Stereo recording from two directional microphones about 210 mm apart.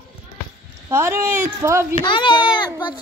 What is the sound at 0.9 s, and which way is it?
Speech, 10° right (ahead or behind).